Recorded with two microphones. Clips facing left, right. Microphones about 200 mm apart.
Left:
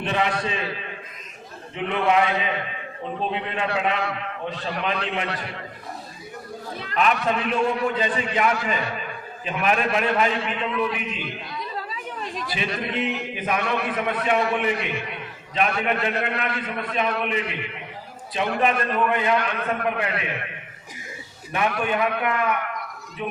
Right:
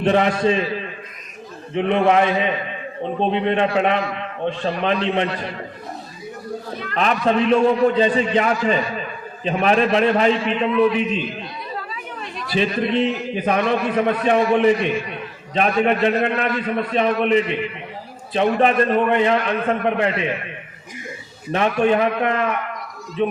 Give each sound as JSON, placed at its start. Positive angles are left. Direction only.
{"t": 0.1, "sound": "a man's voice", "side_deg": -35}
{"t": 1.7, "sound": "a man's voice", "side_deg": -30}
{"t": 6.9, "sound": "a man's voice", "side_deg": -35}
{"t": 12.5, "sound": "a man's voice", "side_deg": -35}
{"t": 21.8, "sound": "a man's voice", "side_deg": -30}